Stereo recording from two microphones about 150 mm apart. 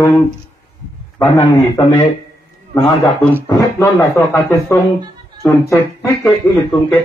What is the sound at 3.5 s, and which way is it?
A man's voice, 20° left (ahead or behind).